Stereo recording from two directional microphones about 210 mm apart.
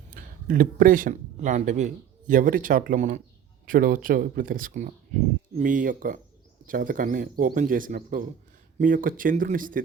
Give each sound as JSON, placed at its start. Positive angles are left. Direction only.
{"t": 0.1, "sound": "speech", "side_deg": -40}